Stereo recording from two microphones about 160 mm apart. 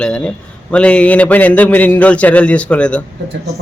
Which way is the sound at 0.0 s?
5° left (ahead or behind).